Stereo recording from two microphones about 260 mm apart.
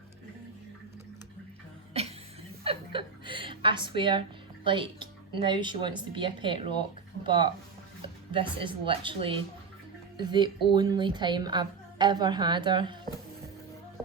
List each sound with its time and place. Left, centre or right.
1.9 s cough: right
2.6 s a woman's voice: centre